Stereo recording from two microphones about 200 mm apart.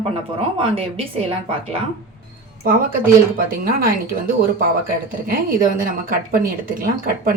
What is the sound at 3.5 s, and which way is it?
Speech, 45° right (ahead or behind).